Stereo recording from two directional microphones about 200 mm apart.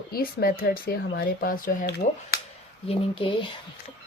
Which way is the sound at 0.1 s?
50° left (ahead or behind).